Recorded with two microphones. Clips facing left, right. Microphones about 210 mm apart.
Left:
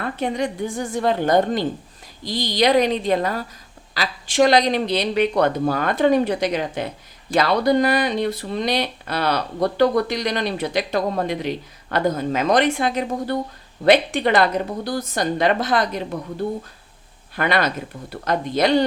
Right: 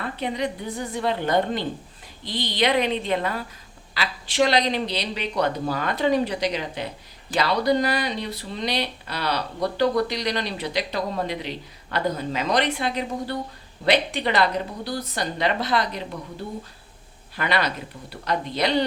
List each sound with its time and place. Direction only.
0.2 s a woman's voice: 45° left (ahead or behind)
17.3 s speech: 50° left (ahead or behind)